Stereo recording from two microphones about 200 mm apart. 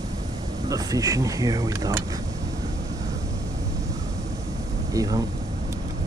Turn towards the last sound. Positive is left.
turn(degrees=-15)  # may be behind; listen again after turning